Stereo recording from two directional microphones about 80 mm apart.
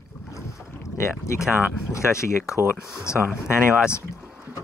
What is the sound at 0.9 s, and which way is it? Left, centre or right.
Speech, left.